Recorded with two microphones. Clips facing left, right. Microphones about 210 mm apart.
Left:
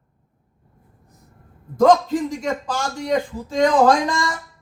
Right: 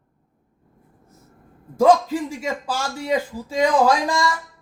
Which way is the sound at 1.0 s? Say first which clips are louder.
Right 2 dB; 15° left (ahead or behind).